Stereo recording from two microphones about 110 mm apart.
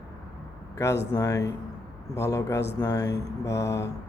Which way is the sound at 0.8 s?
30° left (ahead or behind).